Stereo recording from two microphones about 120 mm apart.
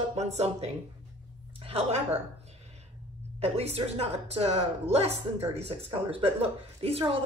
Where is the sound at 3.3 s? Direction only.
60° right (ahead or behind).